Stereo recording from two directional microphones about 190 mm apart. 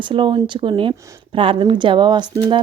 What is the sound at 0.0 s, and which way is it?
A woman's voice, 25° right (ahead or behind).